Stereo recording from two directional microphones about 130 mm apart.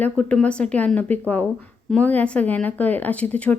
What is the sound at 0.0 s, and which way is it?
A woman's voice, 10° left (ahead or behind).